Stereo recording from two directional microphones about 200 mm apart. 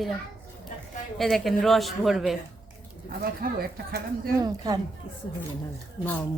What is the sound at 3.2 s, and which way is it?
Speech, 50° right (ahead or behind).